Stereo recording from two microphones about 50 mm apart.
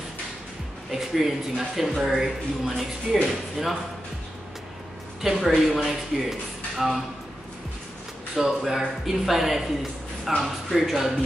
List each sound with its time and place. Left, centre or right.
0.9 s speech: centre
5.2 s speech: centre
8.4 s speech: centre